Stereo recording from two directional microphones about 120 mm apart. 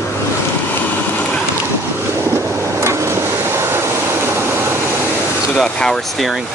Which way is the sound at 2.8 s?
25° right (ahead or behind).